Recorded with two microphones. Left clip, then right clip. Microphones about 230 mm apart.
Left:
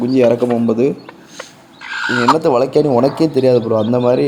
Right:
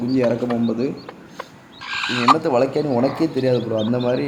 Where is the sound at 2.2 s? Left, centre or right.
Left.